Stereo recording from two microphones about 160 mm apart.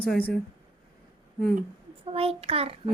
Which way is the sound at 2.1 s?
35° right (ahead or behind).